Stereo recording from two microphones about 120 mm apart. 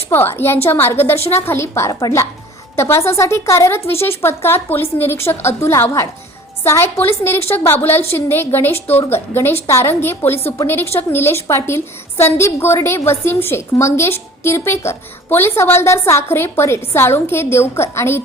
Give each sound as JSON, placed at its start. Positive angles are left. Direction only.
{"t": 0.1, "sound": "a woman's voice", "side_deg": 15}
{"t": 1.1, "sound": "a woman's voice", "side_deg": 60}
{"t": 1.5, "sound": "a woman's voice", "side_deg": 20}